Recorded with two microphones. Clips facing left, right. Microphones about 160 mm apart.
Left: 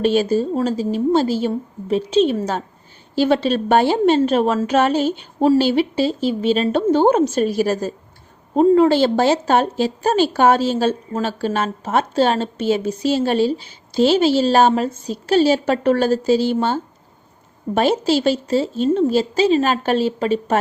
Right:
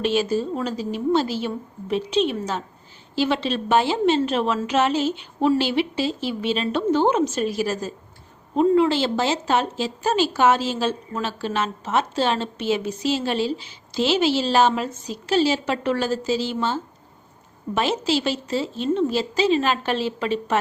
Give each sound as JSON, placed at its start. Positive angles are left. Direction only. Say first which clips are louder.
{"t": 0.0, "sound": "speech", "louder": "left 5 dB", "side_deg": 50}
{"t": 0.3, "sound": "a woman's voice", "louder": "left 5 dB", "side_deg": 35}
{"t": 5.5, "sound": "a woman's voice", "louder": "left 5 dB", "side_deg": 40}
{"t": 8.5, "sound": "speech", "louder": "left 5 dB", "side_deg": 45}
{"t": 15.3, "sound": "speech", "louder": "left 5 dB", "side_deg": 50}